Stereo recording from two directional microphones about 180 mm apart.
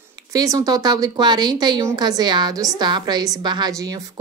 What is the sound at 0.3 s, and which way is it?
A woman's voice, 20° right (ahead or behind).